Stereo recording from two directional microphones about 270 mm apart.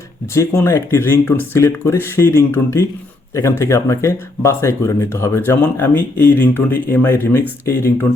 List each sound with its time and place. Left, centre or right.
0.3 s speech: centre